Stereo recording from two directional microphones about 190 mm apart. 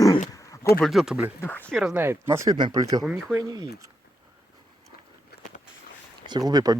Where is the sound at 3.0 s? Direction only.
Centre (ahead or behind).